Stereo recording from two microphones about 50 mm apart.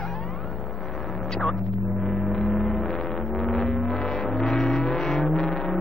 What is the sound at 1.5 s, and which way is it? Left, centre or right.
Vehicle, centre.